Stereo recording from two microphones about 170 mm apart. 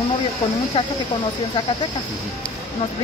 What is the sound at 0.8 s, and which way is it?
Speech, 35° left (ahead or behind).